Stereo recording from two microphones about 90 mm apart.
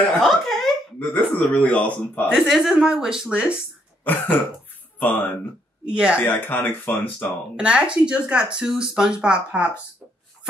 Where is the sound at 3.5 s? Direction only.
20° left (ahead or behind).